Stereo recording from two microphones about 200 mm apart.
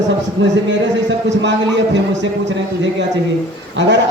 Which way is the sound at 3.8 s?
60° right (ahead or behind).